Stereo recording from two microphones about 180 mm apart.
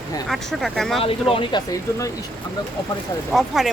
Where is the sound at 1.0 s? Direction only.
30° left (ahead or behind).